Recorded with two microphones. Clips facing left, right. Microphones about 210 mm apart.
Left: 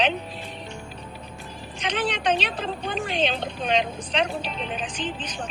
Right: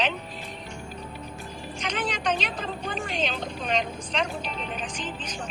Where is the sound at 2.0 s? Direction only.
30° left (ahead or behind).